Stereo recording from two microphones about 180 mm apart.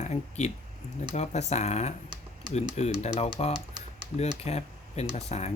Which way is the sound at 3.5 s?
25° right (ahead or behind).